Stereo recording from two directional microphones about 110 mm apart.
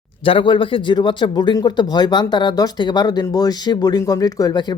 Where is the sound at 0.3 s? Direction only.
50° left (ahead or behind).